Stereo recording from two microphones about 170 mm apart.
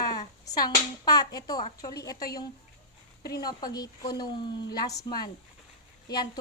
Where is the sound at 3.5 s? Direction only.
25° left (ahead or behind).